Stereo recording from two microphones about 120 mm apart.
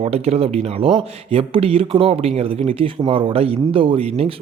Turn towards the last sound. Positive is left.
turn(degrees=-55)  # may be behind; listen again after turning